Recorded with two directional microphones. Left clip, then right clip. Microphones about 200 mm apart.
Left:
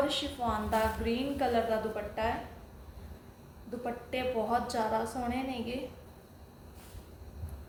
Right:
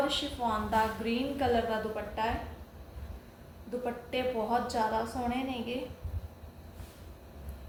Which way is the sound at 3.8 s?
10° left (ahead or behind).